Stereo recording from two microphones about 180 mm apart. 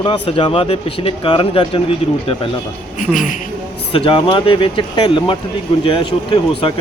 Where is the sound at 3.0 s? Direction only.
45° left (ahead or behind).